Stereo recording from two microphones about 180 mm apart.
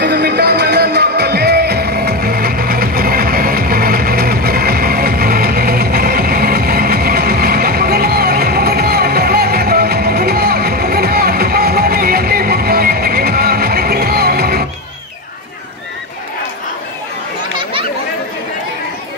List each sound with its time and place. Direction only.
0.0 s music: 65° right (ahead or behind)